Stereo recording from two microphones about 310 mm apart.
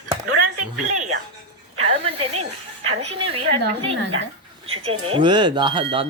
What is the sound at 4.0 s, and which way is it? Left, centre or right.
Speech, right.